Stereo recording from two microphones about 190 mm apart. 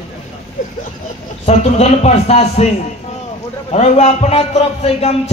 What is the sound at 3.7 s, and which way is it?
A man's voice, 35° left (ahead or behind).